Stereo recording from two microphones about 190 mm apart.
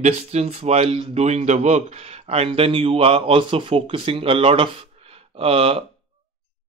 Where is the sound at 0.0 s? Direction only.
35° right (ahead or behind).